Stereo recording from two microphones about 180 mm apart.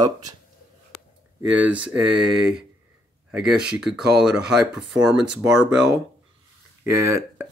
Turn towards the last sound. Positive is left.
turn(degrees=-15)  # may be behind; listen again after turning